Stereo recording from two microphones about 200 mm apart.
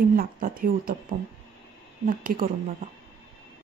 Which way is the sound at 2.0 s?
45° right (ahead or behind).